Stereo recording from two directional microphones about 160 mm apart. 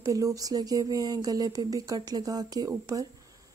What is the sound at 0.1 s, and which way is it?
A woman's voice, 20° right (ahead or behind).